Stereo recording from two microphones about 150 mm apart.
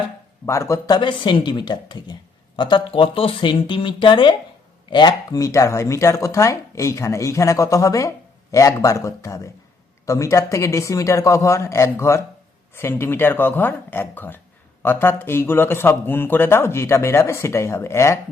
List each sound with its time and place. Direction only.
0.4 s speech: 20° left (ahead or behind)